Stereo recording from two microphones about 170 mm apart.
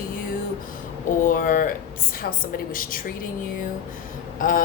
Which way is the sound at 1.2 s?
55° left (ahead or behind).